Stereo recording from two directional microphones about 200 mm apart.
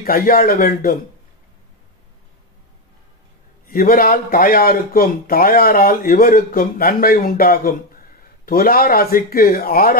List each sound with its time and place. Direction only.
0.0 s speech: 45° left (ahead or behind)
3.6 s speech: 45° left (ahead or behind)